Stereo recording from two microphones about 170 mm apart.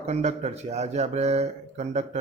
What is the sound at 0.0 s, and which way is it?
Speech, 40° right (ahead or behind).